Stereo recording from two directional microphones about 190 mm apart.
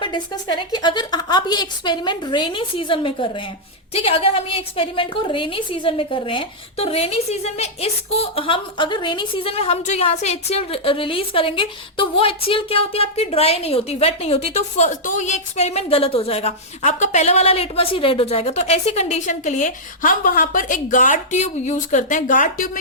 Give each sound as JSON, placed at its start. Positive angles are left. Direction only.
{"t": 0.0, "sound": "a woman's voice", "side_deg": 25}